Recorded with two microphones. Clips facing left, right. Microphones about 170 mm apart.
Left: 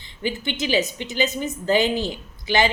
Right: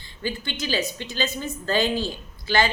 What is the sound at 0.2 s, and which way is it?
A woman's voice, 20° left (ahead or behind).